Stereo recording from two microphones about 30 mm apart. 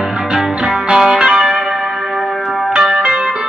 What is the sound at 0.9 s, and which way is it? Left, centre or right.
Music, right.